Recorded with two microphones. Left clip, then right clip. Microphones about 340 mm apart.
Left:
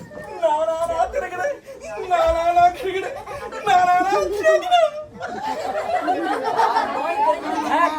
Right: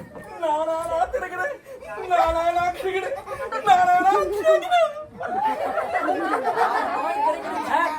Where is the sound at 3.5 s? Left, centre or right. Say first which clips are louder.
Left 1 dB; centre.